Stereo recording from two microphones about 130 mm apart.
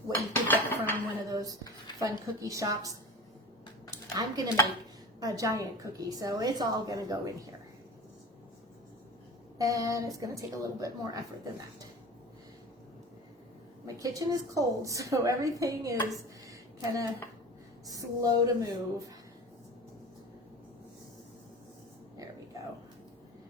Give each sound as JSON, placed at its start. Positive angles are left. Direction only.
{"t": 0.1, "sound": "dishes", "side_deg": 15}
{"t": 1.3, "sound": "a sound", "side_deg": -25}
{"t": 2.0, "sound": "a woman's voice", "side_deg": -25}
{"t": 3.9, "sound": "a sound", "side_deg": -30}
{"t": 5.2, "sound": "a woman's voice", "side_deg": -25}
{"t": 9.6, "sound": "a woman's voice", "side_deg": -25}
{"t": 13.8, "sound": "a woman's voice", "side_deg": -25}
{"t": 16.0, "sound": "a sound", "side_deg": -25}
{"t": 17.8, "sound": "a woman's voice", "side_deg": -30}